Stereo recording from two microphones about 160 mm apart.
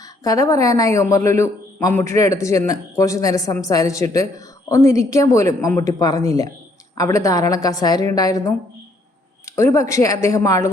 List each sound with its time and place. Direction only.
0.3 s a man's voice: 20° left (ahead or behind)